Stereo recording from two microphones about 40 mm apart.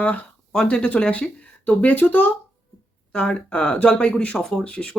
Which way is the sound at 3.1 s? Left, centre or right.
Left.